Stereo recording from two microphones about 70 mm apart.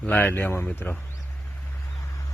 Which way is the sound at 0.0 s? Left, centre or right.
Left.